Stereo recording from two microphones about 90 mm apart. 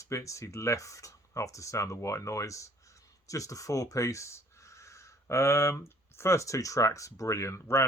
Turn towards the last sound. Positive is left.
turn(degrees=30)  # may be behind; listen again after turning